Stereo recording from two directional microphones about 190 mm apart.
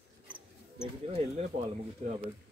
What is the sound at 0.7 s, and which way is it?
Bird, 30° right (ahead or behind).